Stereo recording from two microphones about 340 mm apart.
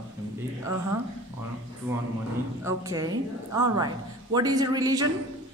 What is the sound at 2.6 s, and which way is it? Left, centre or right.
Speech, centre.